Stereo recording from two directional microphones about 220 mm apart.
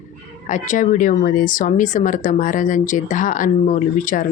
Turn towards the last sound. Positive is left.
turn(degrees=35)  # may be behind; listen again after turning